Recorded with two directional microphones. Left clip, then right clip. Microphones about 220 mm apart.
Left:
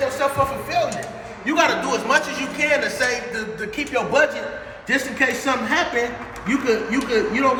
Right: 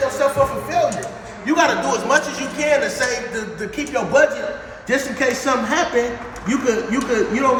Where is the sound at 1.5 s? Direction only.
10° right (ahead or behind).